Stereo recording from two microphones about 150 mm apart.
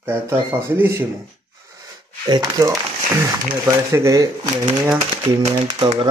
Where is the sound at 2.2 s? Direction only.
25° right (ahead or behind).